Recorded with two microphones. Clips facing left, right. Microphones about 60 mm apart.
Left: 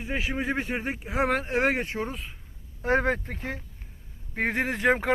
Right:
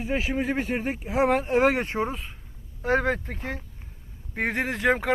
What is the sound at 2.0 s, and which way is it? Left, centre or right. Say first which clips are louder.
Speech: right 4 dB; centre.